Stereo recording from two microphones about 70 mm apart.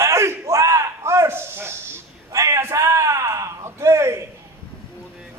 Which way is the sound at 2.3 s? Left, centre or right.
Right.